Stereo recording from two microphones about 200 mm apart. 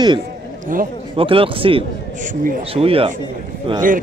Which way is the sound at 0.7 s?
45° right (ahead or behind).